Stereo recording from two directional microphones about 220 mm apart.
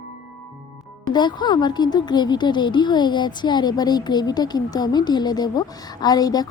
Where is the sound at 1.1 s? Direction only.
20° left (ahead or behind).